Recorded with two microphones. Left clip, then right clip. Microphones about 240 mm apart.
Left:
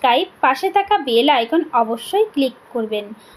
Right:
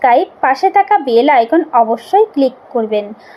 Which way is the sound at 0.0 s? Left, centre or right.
Centre.